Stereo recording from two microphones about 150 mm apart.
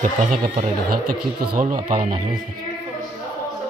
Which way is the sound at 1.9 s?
60° right (ahead or behind).